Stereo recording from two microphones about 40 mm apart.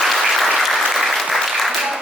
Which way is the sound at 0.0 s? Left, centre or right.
Centre.